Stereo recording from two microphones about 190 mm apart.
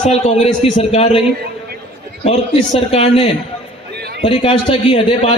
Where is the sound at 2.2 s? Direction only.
30° left (ahead or behind).